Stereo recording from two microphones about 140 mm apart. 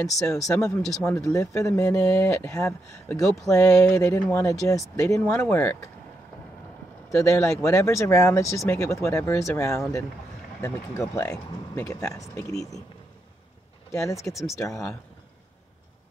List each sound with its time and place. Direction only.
0.5 s speech: 20° left (ahead or behind)
0.8 s speech: 5° left (ahead or behind)
1.2 s speech: 20° left (ahead or behind)
7.1 s speech: 20° left (ahead or behind)
13.9 s speech: 20° left (ahead or behind)
14.3 s speech: centre (ahead or behind)